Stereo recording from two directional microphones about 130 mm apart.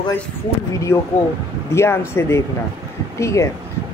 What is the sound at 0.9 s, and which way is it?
A woman's voice, 20° left (ahead or behind).